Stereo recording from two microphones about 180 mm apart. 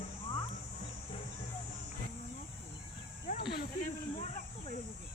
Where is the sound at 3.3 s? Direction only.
60° left (ahead or behind).